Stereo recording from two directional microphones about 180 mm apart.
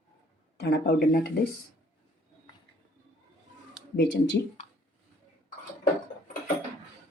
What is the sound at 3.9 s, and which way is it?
Speech, 70° left (ahead or behind).